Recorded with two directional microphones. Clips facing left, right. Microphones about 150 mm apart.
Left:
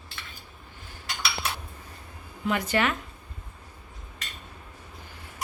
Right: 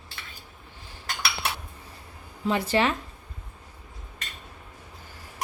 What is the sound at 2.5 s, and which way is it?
Speech, 30° right (ahead or behind).